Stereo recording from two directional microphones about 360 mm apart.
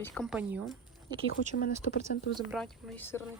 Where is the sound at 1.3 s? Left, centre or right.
Left.